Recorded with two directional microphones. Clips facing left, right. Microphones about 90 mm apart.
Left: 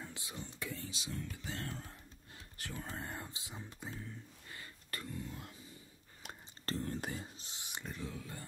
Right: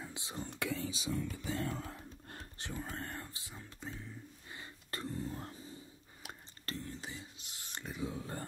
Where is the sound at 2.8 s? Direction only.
Centre (ahead or behind).